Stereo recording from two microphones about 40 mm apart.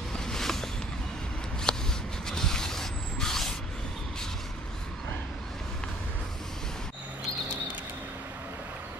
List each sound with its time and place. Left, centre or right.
0.2 s a sound: centre
1.7 s shuffling cards: centre
2.2 s vehicle: centre